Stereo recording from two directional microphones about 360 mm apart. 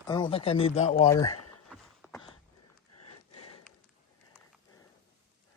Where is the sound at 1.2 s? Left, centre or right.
Left.